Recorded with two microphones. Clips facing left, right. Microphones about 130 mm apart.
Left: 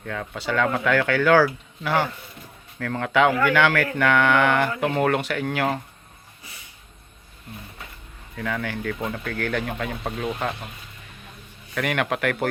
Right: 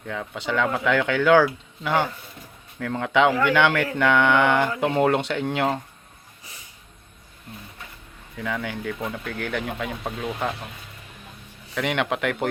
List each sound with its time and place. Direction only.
0.0 s speech: 10° right (ahead or behind)
8.4 s speech: 15° right (ahead or behind)
11.7 s speech: 20° right (ahead or behind)